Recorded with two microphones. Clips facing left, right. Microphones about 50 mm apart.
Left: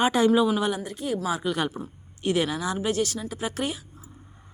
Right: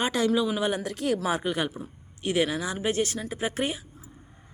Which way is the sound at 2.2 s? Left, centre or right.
Centre.